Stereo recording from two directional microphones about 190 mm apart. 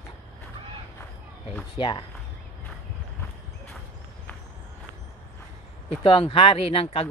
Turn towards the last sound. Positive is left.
turn(degrees=30)  # may be behind; listen again after turning